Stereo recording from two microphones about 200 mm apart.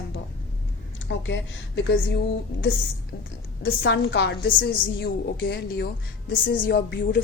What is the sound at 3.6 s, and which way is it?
A woman's voice, 60° left (ahead or behind).